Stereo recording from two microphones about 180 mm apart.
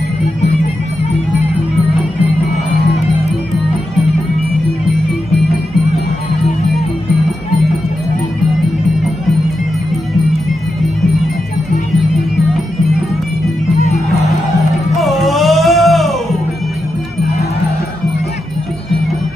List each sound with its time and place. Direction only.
13.7 s music: 40° left (ahead or behind)
15.0 s music: centre (ahead or behind)